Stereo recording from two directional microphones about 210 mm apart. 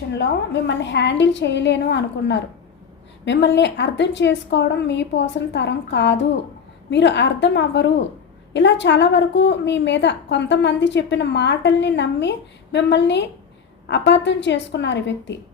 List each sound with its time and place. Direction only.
0.1 s a woman's voice: 55° left (ahead or behind)